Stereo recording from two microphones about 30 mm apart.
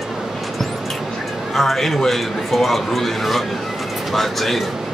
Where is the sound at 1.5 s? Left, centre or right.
Centre.